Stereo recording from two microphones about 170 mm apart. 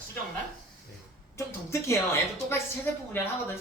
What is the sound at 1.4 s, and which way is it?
A woman's voice, 15° left (ahead or behind).